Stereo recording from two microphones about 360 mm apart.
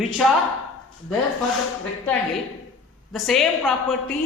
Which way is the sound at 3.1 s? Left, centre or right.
Centre.